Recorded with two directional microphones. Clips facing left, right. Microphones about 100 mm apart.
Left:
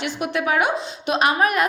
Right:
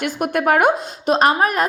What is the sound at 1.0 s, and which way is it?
Speech, 40° right (ahead or behind).